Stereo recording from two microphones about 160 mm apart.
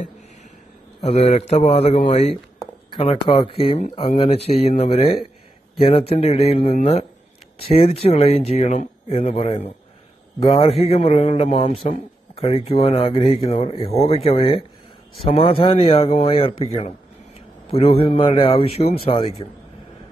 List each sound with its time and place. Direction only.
1.0 s speech: 40° left (ahead or behind)
10.9 s speech: 35° left (ahead or behind)